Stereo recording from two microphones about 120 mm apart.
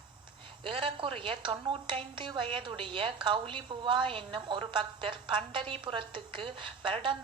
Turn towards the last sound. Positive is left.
turn(degrees=-45)  # may be behind; listen again after turning